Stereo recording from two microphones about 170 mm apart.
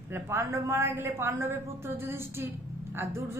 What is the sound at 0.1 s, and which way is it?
A woman's voice, 15° right (ahead or behind).